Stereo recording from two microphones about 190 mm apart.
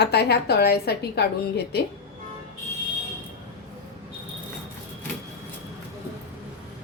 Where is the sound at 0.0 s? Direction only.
60° left (ahead or behind).